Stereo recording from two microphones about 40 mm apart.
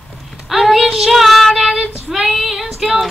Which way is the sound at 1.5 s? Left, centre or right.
Centre.